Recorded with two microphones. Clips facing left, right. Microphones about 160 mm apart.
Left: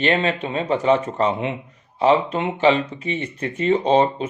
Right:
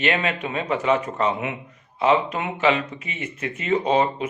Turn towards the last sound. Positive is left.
turn(degrees=30)  # may be behind; listen again after turning